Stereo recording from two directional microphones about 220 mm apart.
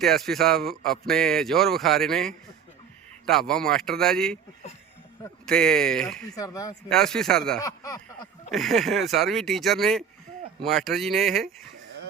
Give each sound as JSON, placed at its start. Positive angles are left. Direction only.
{"t": 0.0, "sound": "speech", "side_deg": 0}
{"t": 5.5, "sound": "speech", "side_deg": 5}
{"t": 6.3, "sound": "a sound", "side_deg": 15}
{"t": 6.8, "sound": "speech", "side_deg": 5}
{"t": 7.6, "sound": "a sound", "side_deg": 15}
{"t": 8.4, "sound": "speech", "side_deg": 0}